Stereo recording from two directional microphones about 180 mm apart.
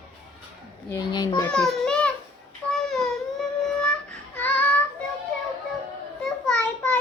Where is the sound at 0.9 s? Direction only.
20° left (ahead or behind).